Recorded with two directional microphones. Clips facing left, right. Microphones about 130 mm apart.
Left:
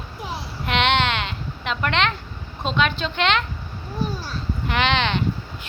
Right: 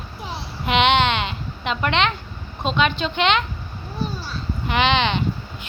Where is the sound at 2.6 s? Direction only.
Centre (ahead or behind).